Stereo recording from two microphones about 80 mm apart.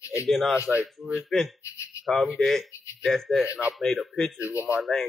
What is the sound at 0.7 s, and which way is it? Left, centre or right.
Speech, centre.